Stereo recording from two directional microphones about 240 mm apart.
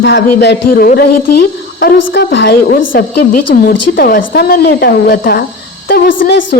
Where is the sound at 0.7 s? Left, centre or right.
Left.